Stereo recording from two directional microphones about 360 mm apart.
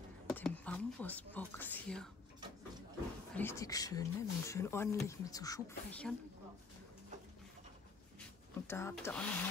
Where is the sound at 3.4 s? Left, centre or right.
Centre.